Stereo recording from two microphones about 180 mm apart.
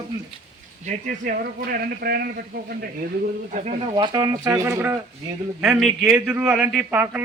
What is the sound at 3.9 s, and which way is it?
A man's voice, 25° right (ahead or behind).